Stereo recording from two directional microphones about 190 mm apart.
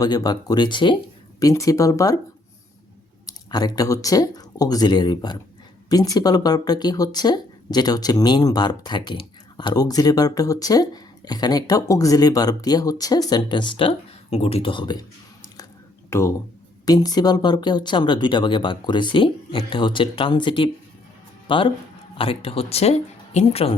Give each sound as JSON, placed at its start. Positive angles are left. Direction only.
{"t": 0.0, "sound": "speech", "side_deg": 20}
{"t": 3.2, "sound": "speech", "side_deg": 20}
{"t": 16.0, "sound": "speech", "side_deg": 15}